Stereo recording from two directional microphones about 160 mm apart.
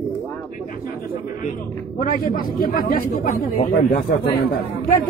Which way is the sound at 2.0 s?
65° left (ahead or behind).